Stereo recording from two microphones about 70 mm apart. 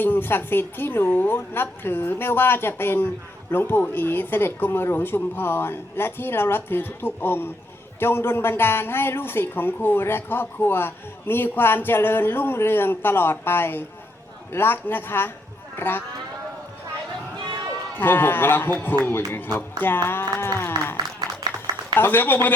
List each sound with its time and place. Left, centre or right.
0.0 s a woman's voice: left
17.9 s a woman's voice: left
21.9 s a woman's voice: left